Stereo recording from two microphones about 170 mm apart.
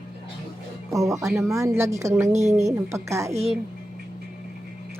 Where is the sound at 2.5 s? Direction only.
15° right (ahead or behind).